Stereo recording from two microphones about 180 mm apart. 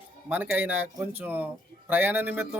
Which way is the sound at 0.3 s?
10° right (ahead or behind).